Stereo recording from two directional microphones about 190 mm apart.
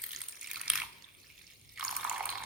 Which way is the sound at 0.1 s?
Centre (ahead or behind).